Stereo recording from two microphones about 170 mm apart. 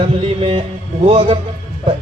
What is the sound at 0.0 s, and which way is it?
A man's voice, 35° right (ahead or behind).